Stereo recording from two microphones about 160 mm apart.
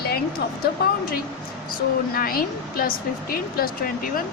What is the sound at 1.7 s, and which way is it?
A woman's voice, 65° left (ahead or behind).